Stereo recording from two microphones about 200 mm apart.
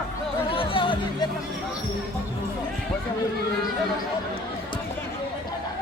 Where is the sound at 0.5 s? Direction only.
25° left (ahead or behind).